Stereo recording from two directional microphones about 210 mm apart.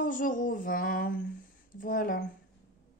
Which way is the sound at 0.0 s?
40° left (ahead or behind).